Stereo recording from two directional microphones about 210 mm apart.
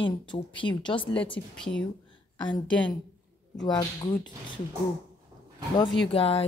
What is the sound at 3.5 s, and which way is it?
Speech, 20° left (ahead or behind).